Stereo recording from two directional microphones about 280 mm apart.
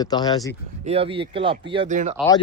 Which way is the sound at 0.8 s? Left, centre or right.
Right.